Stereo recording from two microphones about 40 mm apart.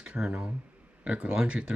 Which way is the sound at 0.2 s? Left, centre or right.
Right.